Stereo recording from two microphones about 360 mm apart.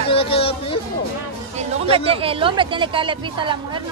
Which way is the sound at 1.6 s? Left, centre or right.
Centre.